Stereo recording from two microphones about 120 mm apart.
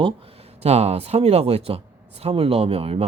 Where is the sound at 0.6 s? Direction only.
60° right (ahead or behind).